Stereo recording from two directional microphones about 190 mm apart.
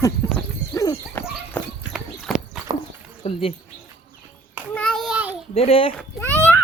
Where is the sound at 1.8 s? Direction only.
5° right (ahead or behind).